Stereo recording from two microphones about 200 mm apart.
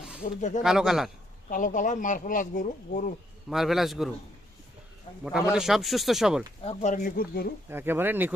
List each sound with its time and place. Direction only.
0.2 s speech: 40° left (ahead or behind)
0.6 s speech: centre (ahead or behind)
1.5 s speech: 40° left (ahead or behind)
3.5 s speech: centre (ahead or behind)
5.2 s speech: 5° right (ahead or behind)
6.7 s speech: 40° left (ahead or behind)
7.7 s speech: 10° right (ahead or behind)